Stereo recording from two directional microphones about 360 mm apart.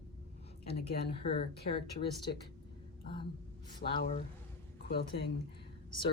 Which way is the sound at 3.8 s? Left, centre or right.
Centre.